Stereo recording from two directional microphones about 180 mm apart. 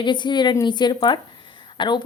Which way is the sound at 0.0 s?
25° left (ahead or behind).